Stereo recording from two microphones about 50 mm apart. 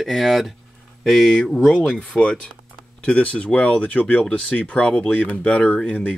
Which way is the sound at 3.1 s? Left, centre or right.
Left.